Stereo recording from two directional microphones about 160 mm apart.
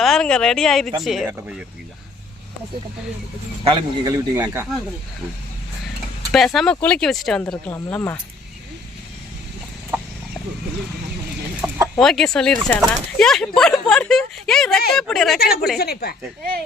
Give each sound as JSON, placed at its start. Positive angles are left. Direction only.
{"t": 0.0, "sound": "a woman's voice", "side_deg": 5}
{"t": 3.6, "sound": "speech", "side_deg": -30}
{"t": 6.3, "sound": "a woman's voice", "side_deg": 0}
{"t": 9.9, "sound": "chicken", "side_deg": -10}
{"t": 11.6, "sound": "chicken", "side_deg": -15}
{"t": 11.9, "sound": "a woman's voice", "side_deg": 5}
{"t": 15.4, "sound": "speech", "side_deg": 75}